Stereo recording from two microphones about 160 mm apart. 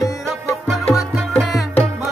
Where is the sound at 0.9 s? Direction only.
Centre (ahead or behind).